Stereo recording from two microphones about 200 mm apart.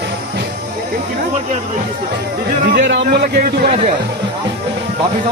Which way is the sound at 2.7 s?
55° right (ahead or behind).